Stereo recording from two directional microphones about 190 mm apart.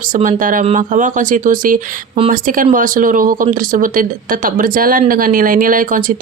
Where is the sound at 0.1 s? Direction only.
45° right (ahead or behind).